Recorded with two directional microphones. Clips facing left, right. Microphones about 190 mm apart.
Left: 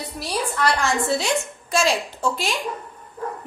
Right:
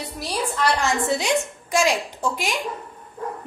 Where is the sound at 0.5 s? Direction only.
20° right (ahead or behind).